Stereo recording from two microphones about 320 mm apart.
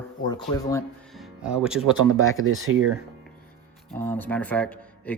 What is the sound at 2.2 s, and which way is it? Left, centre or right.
Speech, right.